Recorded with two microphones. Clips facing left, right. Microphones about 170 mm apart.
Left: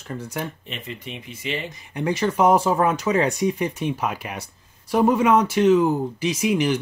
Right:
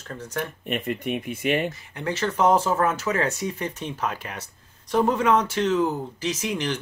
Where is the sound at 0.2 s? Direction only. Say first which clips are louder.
Right 2 dB; 10° left (ahead or behind).